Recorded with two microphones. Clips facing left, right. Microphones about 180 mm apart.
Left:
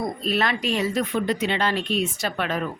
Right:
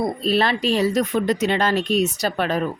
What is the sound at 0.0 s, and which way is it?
Speech, 30° right (ahead or behind).